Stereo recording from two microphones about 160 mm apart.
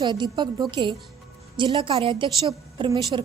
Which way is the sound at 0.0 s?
30° right (ahead or behind).